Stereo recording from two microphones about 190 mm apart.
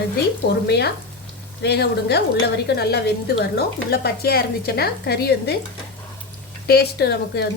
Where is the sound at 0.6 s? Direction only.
60° left (ahead or behind).